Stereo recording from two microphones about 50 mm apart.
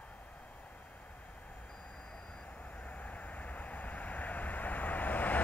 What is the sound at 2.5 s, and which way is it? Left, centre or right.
Vehicle, left.